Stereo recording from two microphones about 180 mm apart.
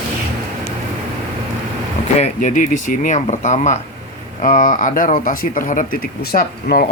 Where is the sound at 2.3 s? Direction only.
45° left (ahead or behind).